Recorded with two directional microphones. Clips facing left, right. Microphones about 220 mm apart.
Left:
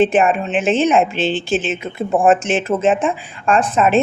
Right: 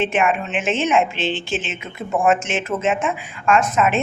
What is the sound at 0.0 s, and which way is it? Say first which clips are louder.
Speech: left 5 dB; 35° left (ahead or behind).